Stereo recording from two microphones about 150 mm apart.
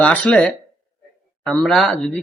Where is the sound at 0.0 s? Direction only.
10° left (ahead or behind).